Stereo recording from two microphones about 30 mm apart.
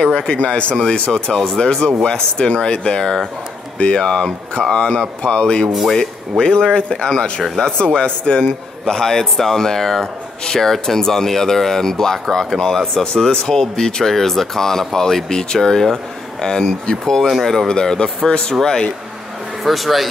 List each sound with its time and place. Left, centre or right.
0.1 s speech: left
1.1 s speech: left
5.7 s speech: centre
5.9 s speech: left
13.0 s speech: left
17.6 s speech: left
19.6 s speech: centre